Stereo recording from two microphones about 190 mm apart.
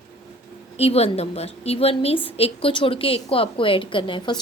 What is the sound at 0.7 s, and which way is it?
A woman's voice, 30° left (ahead or behind).